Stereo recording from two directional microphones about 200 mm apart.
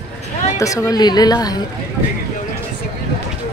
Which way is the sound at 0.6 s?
15° left (ahead or behind).